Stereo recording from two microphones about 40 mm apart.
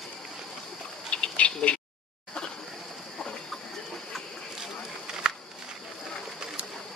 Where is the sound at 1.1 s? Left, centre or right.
Left.